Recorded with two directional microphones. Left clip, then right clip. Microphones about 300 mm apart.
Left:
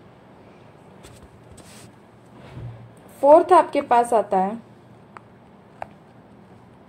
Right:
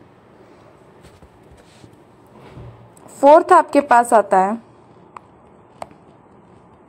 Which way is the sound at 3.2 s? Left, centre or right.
Right.